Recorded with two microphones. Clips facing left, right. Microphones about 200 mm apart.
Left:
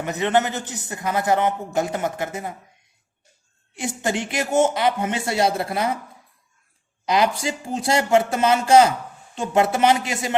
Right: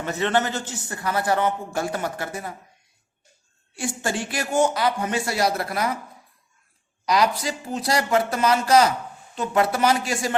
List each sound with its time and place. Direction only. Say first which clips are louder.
0.0 s a man's voice: left 2 dB; 15° left (ahead or behind)
3.8 s a man's voice: left 2 dB; 20° left (ahead or behind)
7.0 s a man's voice: left 1 dB; 25° left (ahead or behind)